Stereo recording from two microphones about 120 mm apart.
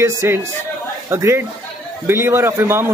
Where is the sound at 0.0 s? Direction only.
20° right (ahead or behind).